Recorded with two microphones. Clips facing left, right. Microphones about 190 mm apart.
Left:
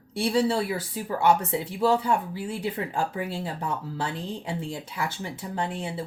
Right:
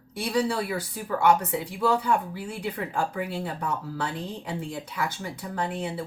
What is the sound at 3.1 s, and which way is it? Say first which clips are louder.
Speech: even; 25° left (ahead or behind).